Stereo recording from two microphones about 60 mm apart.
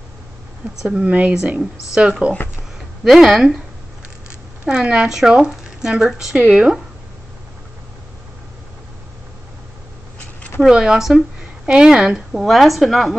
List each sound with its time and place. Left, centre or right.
0.8 s speech: right
3.0 s speech: centre; by 6.8 s right
10.6 s speech: centre
11.6 s speech: centre
12.3 s speech: centre